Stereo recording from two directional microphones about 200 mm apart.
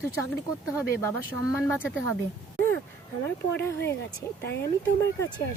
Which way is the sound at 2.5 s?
10° left (ahead or behind).